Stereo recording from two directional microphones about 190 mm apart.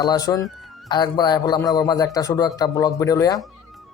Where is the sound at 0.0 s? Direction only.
20° left (ahead or behind).